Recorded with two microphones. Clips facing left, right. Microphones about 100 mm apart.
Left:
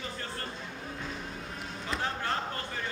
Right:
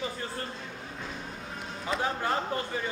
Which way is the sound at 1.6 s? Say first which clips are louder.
Right 4 dB; 5° right (ahead or behind).